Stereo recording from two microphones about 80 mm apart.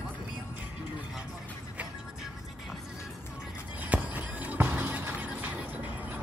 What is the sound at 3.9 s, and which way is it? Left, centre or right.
Music, centre.